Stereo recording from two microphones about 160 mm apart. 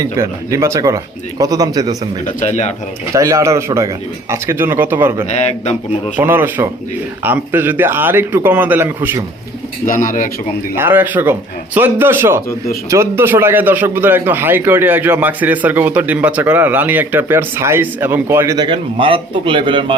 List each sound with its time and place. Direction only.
0.0 s speech: 20° right (ahead or behind)
2.2 s speech: 45° left (ahead or behind)
3.1 s a man's voice: 20° right (ahead or behind)
9.8 s speech: 55° left (ahead or behind)
10.8 s a man's voice: 10° right (ahead or behind)
18.5 s a man's voice: 30° right (ahead or behind)